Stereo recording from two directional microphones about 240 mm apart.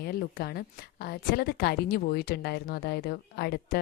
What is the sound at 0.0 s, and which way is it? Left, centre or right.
A woman's voice, left.